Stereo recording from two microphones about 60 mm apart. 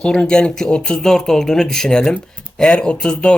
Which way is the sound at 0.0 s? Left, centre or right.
Centre.